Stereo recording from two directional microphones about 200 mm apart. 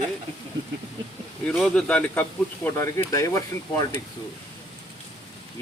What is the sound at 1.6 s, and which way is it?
Speech, centre (ahead or behind).